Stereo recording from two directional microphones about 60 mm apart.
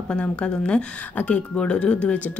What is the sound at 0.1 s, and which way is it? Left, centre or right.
A woman's voice, centre.